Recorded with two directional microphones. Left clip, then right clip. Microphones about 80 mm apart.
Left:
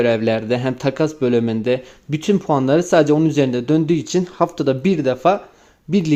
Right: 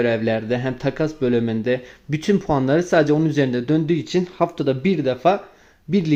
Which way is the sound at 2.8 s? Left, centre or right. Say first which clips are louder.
Left 3 dB; left.